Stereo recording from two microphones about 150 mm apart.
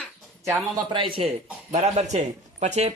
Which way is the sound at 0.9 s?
35° right (ahead or behind).